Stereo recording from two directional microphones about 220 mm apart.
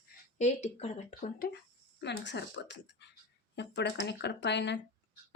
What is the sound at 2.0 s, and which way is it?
A woman's voice, 50° left (ahead or behind).